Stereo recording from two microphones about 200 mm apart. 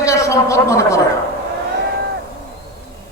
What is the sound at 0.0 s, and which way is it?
Speech, 15° left (ahead or behind).